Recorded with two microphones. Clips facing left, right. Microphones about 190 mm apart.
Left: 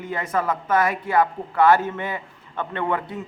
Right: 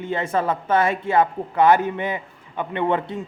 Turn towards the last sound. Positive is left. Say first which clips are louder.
# right 3 dB
turn(degrees=-25)  # may be behind; listen again after turning